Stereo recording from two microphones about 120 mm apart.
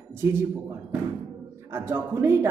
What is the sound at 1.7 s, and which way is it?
Speech, 20° right (ahead or behind).